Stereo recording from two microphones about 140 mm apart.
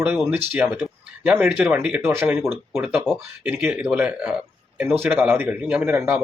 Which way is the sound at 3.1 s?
5° left (ahead or behind).